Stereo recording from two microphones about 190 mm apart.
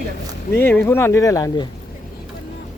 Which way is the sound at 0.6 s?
10° left (ahead or behind).